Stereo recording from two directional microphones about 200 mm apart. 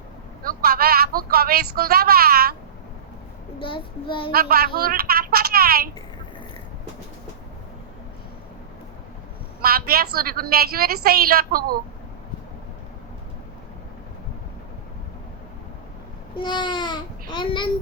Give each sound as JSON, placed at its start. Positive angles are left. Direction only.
{"t": 0.4, "sound": "speech", "side_deg": -50}
{"t": 3.6, "sound": "child singing", "side_deg": 25}
{"t": 4.3, "sound": "speech", "side_deg": -50}
{"t": 9.6, "sound": "speech", "side_deg": -50}
{"t": 16.4, "sound": "a child's voice", "side_deg": 25}